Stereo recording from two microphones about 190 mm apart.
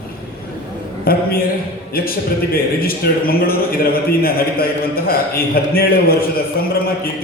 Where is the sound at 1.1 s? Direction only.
50° left (ahead or behind).